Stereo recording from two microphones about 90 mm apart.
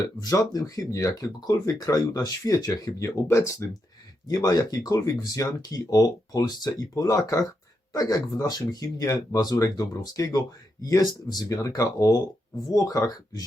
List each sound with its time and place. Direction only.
0.0 s speech: 45° left (ahead or behind)
3.2 s speech: 30° left (ahead or behind)
4.3 s speech: 40° left (ahead or behind)